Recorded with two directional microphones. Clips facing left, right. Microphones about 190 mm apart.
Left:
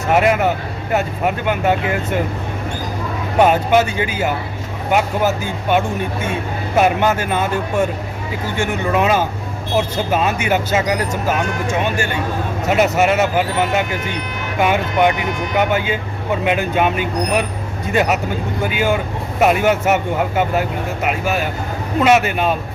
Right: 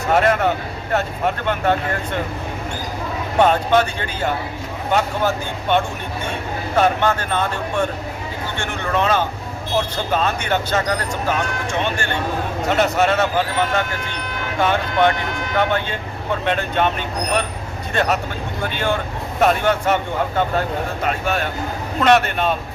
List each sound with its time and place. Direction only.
0.1 s speech: 5° left (ahead or behind)
3.3 s speech: 10° left (ahead or behind)